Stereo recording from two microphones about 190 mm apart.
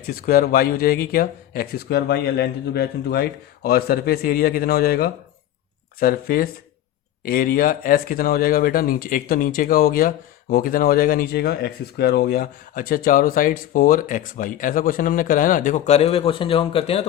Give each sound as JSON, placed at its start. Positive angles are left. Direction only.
{"t": 0.1, "sound": "speech", "side_deg": 50}